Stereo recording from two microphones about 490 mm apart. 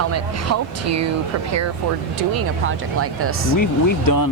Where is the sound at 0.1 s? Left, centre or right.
Right.